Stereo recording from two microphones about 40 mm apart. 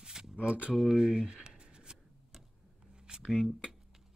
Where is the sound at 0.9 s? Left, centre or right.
Centre.